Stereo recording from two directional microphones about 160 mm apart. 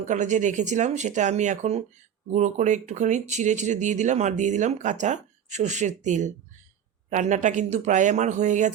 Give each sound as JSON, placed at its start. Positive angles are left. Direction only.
{"t": 0.0, "sound": "speech", "side_deg": -50}